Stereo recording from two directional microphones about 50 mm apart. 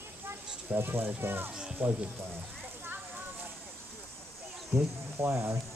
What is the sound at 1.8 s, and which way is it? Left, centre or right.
Insect, right.